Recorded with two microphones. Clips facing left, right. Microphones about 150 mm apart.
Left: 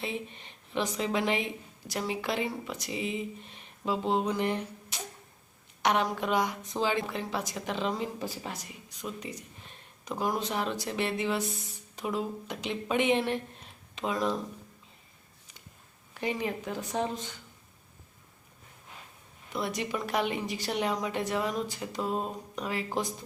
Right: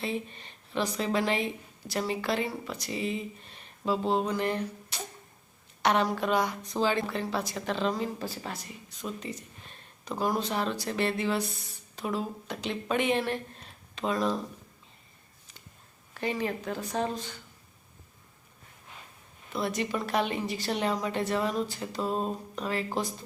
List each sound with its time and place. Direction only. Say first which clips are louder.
0.0 s a woman's voice: right 2 dB; 15° left (ahead or behind)
4.4 s a sound: right 1 dB; 15° left (ahead or behind)
5.8 s a woman's voice: right 2 dB; 15° left (ahead or behind)
16.2 s a woman's voice: right 1 dB; 15° left (ahead or behind)
19.5 s a woman's voice: right 2 dB; 15° left (ahead or behind)